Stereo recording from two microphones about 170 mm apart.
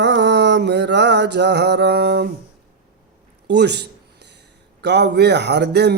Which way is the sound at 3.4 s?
80° right.